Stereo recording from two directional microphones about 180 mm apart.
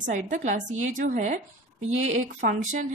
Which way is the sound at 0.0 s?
45° right (ahead or behind).